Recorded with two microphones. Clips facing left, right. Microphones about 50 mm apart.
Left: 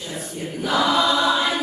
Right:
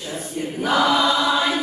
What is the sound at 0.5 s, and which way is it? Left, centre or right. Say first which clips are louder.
Choir: right 2 dB; right.